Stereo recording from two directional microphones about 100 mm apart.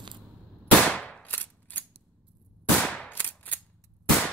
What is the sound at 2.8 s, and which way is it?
Gunshot, 5° left (ahead or behind).